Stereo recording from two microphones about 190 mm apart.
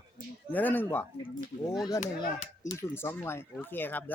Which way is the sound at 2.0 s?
45° left (ahead or behind).